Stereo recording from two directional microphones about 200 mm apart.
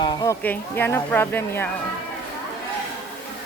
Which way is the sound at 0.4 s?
10° left (ahead or behind).